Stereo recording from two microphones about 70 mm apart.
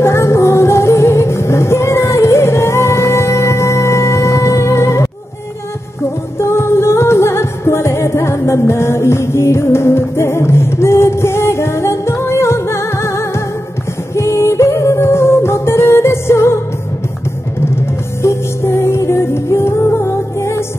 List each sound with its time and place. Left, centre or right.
0.0 s music: left
6.3 s music: left
18.2 s music: left